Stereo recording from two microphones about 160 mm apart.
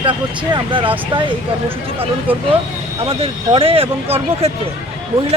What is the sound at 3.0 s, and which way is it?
Speech, 35° right (ahead or behind).